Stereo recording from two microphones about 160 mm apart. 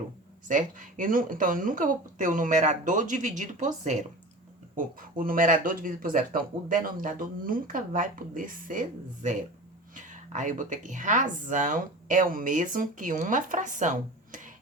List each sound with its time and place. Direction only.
0.4 s speech: 55° right (ahead or behind)